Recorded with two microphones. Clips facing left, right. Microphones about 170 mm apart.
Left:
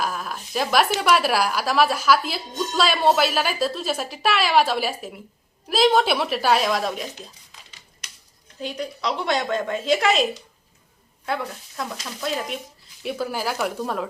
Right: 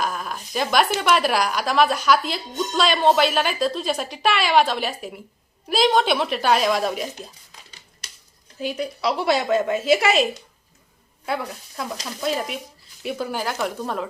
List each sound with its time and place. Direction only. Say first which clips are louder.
0.0 s speech: right 1 dB; centre (ahead or behind)
8.6 s speech: right 3 dB; 5° right (ahead or behind)
11.8 s speech: right 1 dB; centre (ahead or behind)
13.0 s speech: even; centre (ahead or behind)